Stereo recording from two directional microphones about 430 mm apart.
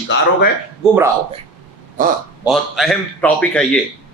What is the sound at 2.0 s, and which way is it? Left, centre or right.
Speech, centre.